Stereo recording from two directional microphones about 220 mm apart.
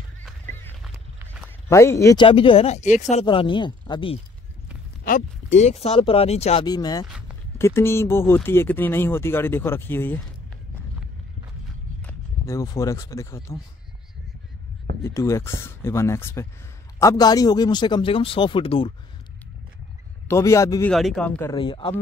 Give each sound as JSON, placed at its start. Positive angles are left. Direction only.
{"t": 0.2, "sound": "honk", "side_deg": 10}
{"t": 1.7, "sound": "speech", "side_deg": 15}
{"t": 2.2, "sound": "speech", "side_deg": 25}
{"t": 5.6, "sound": "speech", "side_deg": 30}
{"t": 7.1, "sound": "a sound", "side_deg": -5}
{"t": 7.5, "sound": "speech", "side_deg": 10}
{"t": 12.0, "sound": "speech", "side_deg": 10}
{"t": 15.0, "sound": "speech", "side_deg": 15}
{"t": 20.2, "sound": "speech", "side_deg": 15}
{"t": 20.9, "sound": "speech", "side_deg": 0}
{"t": 21.5, "sound": "speech", "side_deg": 20}